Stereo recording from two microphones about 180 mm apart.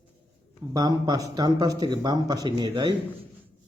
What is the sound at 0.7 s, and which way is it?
Speech, 20° right (ahead or behind).